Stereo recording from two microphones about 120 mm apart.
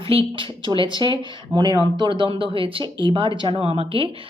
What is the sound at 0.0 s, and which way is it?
Speech, 50° right (ahead or behind).